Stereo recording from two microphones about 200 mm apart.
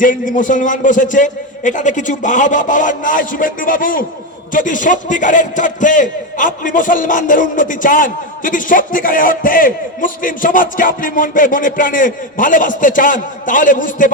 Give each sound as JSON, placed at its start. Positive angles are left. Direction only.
{"t": 0.0, "sound": "a man's voice", "side_deg": 40}